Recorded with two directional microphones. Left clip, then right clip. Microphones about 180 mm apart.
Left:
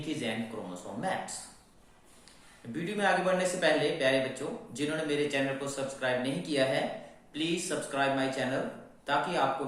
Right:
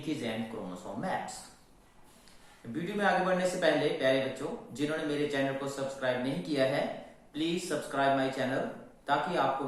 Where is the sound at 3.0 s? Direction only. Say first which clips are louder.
Left 1 dB; 20° left (ahead or behind).